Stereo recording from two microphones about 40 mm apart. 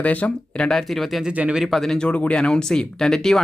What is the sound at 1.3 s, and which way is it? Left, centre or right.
Speech, right.